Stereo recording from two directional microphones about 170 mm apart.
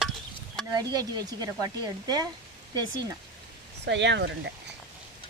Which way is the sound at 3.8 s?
90° right.